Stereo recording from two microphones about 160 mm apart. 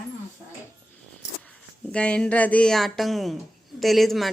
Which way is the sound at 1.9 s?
5° left (ahead or behind).